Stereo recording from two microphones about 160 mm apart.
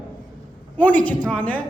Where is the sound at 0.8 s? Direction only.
10° left (ahead or behind).